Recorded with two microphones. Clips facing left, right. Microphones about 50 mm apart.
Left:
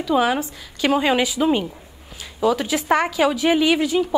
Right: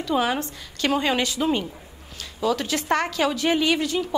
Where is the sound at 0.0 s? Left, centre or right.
Centre.